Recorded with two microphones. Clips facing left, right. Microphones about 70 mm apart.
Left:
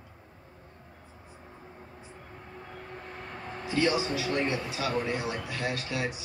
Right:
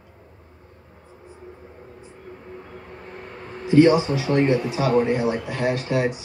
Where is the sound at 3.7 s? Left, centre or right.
Right.